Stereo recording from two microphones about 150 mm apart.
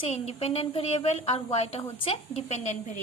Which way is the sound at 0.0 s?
40° left (ahead or behind).